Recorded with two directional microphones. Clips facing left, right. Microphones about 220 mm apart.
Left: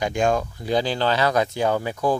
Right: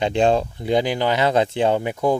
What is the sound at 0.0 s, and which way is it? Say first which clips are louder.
Speech: right 4 dB; 30° right (ahead or behind).